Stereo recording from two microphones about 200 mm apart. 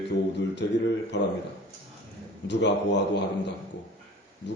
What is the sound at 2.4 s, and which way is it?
Speech, 60° left (ahead or behind).